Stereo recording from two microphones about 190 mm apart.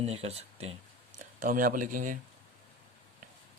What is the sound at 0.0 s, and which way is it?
Speech, 35° right (ahead or behind).